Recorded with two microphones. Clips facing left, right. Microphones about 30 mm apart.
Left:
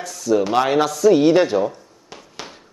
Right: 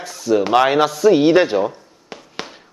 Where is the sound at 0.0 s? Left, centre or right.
Right.